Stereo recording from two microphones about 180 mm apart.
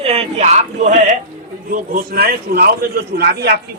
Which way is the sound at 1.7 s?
55° right (ahead or behind).